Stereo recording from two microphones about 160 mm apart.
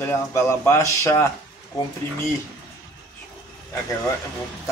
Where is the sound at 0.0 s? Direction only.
15° left (ahead or behind).